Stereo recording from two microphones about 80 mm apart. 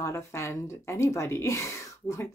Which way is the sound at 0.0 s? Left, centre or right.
Left.